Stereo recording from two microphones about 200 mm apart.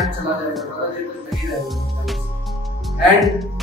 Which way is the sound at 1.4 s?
Centre (ahead or behind).